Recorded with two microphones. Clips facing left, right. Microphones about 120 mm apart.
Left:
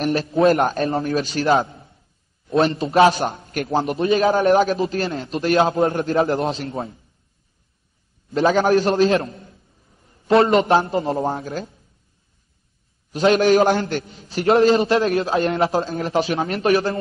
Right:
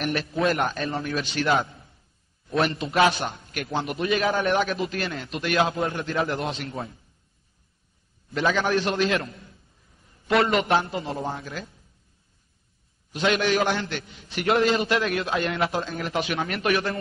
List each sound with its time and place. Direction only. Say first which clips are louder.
0.0 s a man's voice: left 8 dB; 30° left (ahead or behind)
5.9 s a man's voice: left 7 dB; 40° left (ahead or behind)
8.3 s a man's voice: left 7 dB; 35° left (ahead or behind)
13.1 s a man's voice: left 8 dB; 40° left (ahead or behind)